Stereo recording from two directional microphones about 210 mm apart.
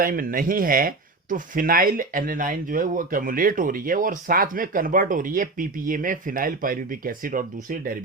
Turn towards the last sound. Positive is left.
turn(degrees=-40)  # may be behind; listen again after turning